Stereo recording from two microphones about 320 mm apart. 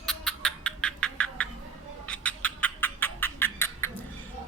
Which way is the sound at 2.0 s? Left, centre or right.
Centre.